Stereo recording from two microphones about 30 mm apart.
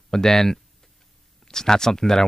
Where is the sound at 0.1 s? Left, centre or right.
Centre.